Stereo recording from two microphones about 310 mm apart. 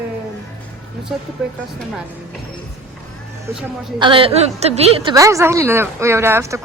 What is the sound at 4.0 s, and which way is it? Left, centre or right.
A woman's voice, centre.